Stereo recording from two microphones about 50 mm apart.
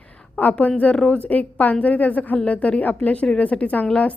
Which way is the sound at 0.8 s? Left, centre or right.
Left.